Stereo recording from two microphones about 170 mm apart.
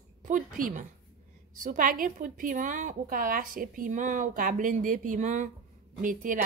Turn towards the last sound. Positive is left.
turn(degrees=-50)  # may be behind; listen again after turning